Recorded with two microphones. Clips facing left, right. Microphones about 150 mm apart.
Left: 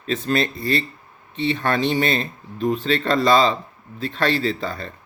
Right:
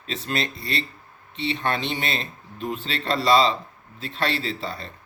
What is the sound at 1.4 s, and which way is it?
Speech, 50° left (ahead or behind).